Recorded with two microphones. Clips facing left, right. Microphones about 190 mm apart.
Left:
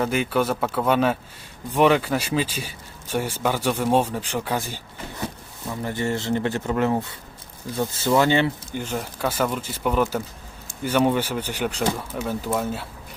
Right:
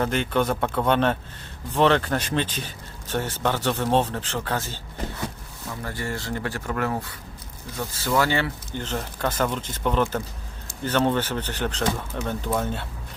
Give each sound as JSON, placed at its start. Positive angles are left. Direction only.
{"t": 0.0, "sound": "speech", "side_deg": 5}
{"t": 5.8, "sound": "speech", "side_deg": 20}